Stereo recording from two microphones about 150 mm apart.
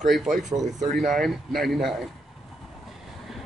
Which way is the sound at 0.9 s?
Centre (ahead or behind).